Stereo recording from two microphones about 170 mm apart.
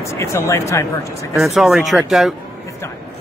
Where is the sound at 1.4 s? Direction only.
Centre (ahead or behind).